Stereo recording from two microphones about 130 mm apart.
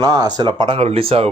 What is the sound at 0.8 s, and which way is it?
Speech, 45° right (ahead or behind).